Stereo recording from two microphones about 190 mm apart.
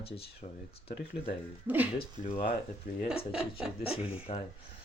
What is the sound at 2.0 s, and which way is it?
Speech, 35° left (ahead or behind).